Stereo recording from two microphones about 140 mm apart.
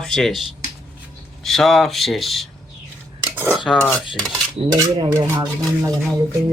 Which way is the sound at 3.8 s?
10° left (ahead or behind).